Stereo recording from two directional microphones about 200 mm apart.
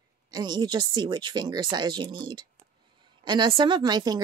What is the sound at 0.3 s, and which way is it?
Speech, 20° right (ahead or behind).